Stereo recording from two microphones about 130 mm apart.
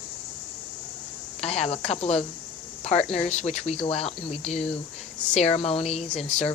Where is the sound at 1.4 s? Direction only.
55° left (ahead or behind).